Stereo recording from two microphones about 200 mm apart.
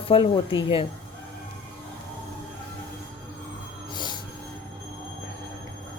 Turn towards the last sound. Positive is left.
turn(degrees=20)  # may be behind; listen again after turning